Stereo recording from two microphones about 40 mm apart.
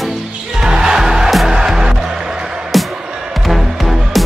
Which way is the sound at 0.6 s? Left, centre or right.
Centre.